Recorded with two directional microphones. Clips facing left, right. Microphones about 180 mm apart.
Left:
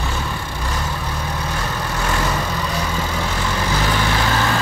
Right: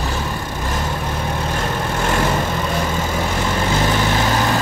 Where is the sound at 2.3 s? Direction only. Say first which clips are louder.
Right 3 dB; 25° right (ahead or behind).